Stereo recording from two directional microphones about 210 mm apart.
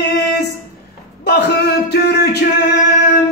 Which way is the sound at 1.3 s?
50° left (ahead or behind).